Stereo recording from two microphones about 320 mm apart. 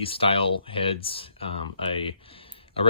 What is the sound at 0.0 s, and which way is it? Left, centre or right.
Speech, centre.